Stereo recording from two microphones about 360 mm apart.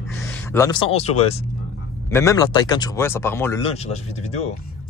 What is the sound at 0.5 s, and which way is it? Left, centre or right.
Speech, centre.